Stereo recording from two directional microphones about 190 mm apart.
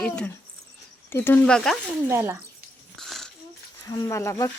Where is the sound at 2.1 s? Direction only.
15° right (ahead or behind).